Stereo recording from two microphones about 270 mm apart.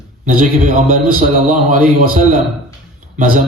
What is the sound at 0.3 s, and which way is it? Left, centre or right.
A man's voice, right.